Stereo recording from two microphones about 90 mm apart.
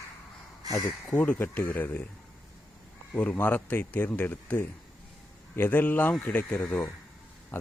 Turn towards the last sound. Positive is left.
turn(degrees=15)  # may be behind; listen again after turning